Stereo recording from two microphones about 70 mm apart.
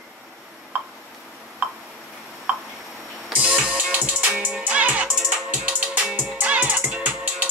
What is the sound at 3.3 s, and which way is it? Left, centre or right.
Music, right.